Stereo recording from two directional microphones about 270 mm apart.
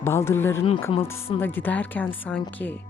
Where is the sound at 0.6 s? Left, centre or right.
Centre.